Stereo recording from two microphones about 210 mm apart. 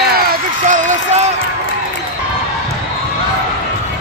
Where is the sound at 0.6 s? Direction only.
35° right (ahead or behind).